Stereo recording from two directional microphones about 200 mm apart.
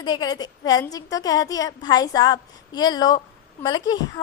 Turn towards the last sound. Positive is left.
turn(degrees=20)  # may be behind; listen again after turning